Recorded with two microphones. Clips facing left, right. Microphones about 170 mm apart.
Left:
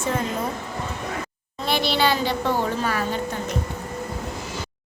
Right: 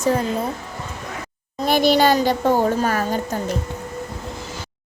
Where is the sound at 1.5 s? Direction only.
45° right (ahead or behind).